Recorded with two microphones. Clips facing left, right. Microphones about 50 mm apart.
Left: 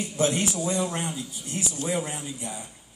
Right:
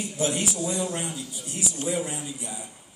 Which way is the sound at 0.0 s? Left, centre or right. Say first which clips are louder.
Left 2 dB; left.